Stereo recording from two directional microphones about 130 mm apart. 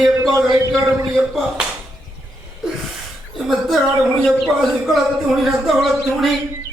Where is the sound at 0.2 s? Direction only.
30° right (ahead or behind).